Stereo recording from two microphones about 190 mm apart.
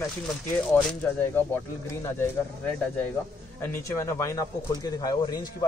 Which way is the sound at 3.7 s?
15° left (ahead or behind).